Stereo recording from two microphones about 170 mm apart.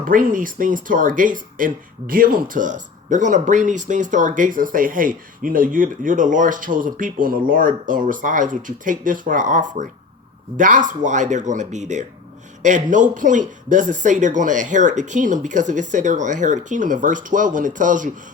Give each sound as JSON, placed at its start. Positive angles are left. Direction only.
{"t": 0.0, "sound": "speech", "side_deg": -55}